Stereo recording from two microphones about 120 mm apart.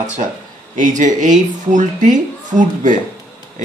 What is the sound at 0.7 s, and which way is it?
Speech, 90° right.